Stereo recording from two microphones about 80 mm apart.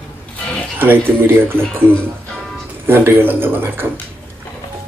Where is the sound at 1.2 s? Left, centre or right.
Right.